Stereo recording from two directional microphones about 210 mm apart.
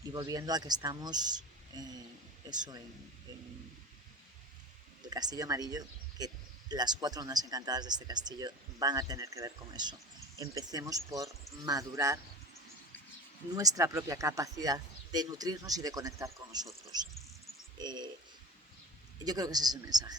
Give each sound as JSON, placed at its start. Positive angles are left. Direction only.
{"t": 0.0, "sound": "speech", "side_deg": -15}
{"t": 5.0, "sound": "speech", "side_deg": -20}
{"t": 13.5, "sound": "speech", "side_deg": -15}
{"t": 17.7, "sound": "speech", "side_deg": -20}
{"t": 19.2, "sound": "speech", "side_deg": -20}